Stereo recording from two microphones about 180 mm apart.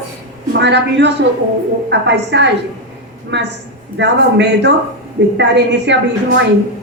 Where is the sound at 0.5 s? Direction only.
70° right (ahead or behind).